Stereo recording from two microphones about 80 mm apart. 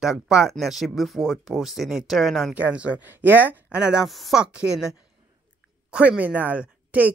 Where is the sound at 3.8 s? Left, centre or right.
Centre.